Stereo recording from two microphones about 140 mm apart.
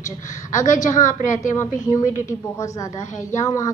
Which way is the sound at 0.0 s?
65° left (ahead or behind).